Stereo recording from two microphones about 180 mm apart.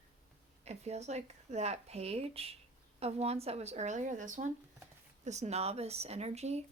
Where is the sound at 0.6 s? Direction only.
35° right (ahead or behind).